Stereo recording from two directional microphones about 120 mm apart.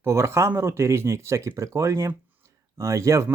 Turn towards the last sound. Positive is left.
turn(degrees=-25)  # may be behind; listen again after turning